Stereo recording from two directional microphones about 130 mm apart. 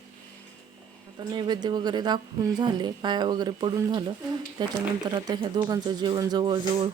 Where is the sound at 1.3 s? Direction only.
30° right (ahead or behind).